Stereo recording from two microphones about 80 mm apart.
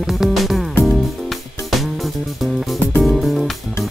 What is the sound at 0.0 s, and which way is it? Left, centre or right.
Music, centre.